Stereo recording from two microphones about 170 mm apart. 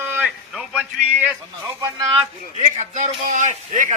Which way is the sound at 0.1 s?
5° right (ahead or behind).